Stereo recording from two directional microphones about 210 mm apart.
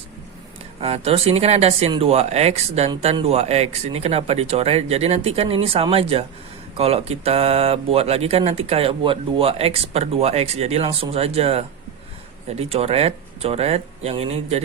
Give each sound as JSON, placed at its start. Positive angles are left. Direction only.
{"t": 0.8, "sound": "speech", "side_deg": -30}